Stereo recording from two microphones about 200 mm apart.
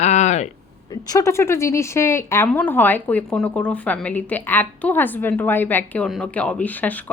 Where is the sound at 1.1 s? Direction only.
15° left (ahead or behind).